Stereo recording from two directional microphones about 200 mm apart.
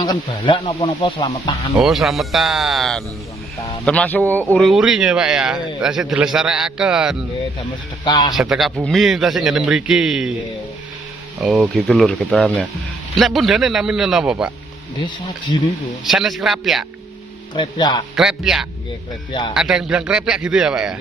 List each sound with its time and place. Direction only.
0.0 s speech: 20° left (ahead or behind)
1.8 s speech: centre (ahead or behind)
8.0 s speech: 20° left (ahead or behind)
8.4 s speech: centre (ahead or behind)
11.4 s speech: centre (ahead or behind)
15.0 s speech: 20° left (ahead or behind)
16.0 s speech: centre (ahead or behind)
17.6 s speech: 20° left (ahead or behind)
18.1 s speech: 5° right (ahead or behind)